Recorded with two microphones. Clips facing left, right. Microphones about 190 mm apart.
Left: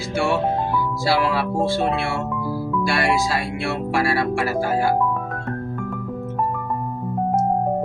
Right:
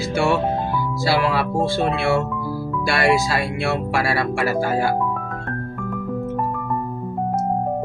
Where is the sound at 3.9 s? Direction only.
70° right (ahead or behind).